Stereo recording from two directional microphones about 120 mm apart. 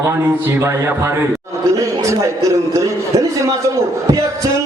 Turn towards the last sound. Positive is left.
turn(degrees=-25)  # may be behind; listen again after turning